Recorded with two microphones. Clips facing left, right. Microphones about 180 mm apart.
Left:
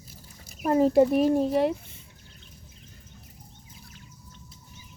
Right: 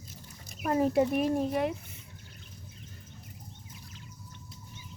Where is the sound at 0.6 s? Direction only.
35° left (ahead or behind).